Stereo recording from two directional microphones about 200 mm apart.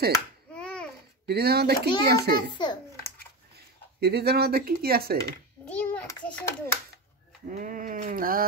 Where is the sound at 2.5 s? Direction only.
20° left (ahead or behind).